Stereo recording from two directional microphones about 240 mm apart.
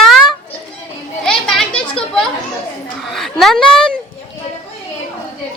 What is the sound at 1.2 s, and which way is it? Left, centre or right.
Children playing, centre.